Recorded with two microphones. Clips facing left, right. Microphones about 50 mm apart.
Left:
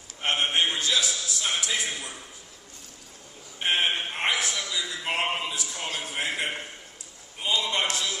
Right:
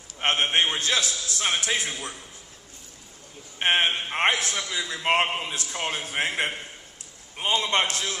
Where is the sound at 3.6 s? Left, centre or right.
Right.